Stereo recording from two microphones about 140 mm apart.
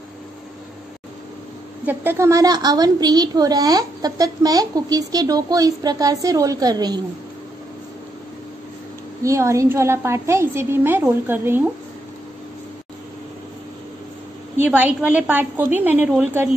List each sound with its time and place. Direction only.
1.9 s a child's voice: 15° right (ahead or behind)
9.2 s a child's voice: 20° right (ahead or behind)
14.6 s a woman's voice: 15° right (ahead or behind)